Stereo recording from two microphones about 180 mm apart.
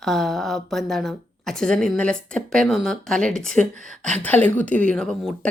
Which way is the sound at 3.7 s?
45° right (ahead or behind).